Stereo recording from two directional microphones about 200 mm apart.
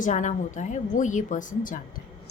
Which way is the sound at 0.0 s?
40° left (ahead or behind).